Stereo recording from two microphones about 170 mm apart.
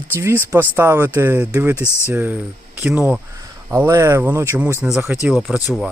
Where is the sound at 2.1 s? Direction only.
10° right (ahead or behind).